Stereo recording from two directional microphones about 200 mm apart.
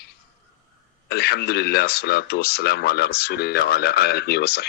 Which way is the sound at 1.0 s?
55° left (ahead or behind).